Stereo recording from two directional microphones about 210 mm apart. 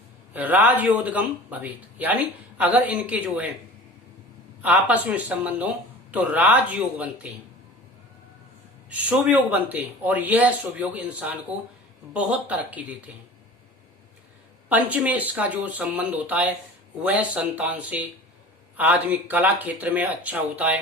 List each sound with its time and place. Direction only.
0.3 s speech: 10° right (ahead or behind)
4.6 s speech: 5° right (ahead or behind)
8.9 s speech: 5° right (ahead or behind)
14.7 s speech: 5° right (ahead or behind)